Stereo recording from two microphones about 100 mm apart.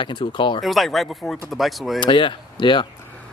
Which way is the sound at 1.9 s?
55° left (ahead or behind).